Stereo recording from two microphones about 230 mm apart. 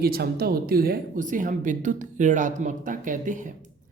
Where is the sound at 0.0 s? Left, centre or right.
Right.